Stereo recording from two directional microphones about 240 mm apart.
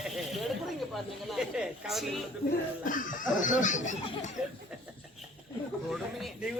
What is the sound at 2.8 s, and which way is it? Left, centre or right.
Speech, left.